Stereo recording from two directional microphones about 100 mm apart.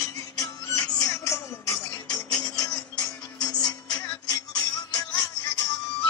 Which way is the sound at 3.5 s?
40° left (ahead or behind).